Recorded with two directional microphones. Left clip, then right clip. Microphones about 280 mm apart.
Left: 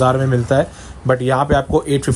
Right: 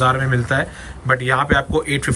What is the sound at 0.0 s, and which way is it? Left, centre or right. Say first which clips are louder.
Speech: left 2 dB; centre.